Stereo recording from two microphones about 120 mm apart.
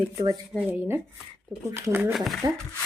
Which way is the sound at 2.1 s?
Centre (ahead or behind).